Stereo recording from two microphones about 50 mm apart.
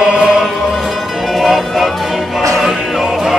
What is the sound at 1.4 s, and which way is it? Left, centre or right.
Music, centre.